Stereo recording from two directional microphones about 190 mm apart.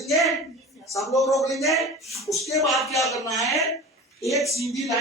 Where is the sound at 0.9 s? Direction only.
15° left (ahead or behind).